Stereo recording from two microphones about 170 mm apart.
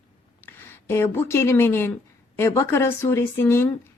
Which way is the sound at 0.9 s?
15° left (ahead or behind).